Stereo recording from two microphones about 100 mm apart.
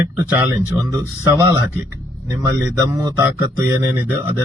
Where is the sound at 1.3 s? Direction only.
25° right (ahead or behind).